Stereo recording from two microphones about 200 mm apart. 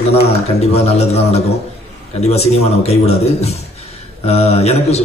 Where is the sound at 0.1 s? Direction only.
30° left (ahead or behind).